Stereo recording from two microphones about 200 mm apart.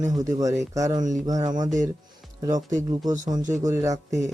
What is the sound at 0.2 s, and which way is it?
Speech, 15° right (ahead or behind).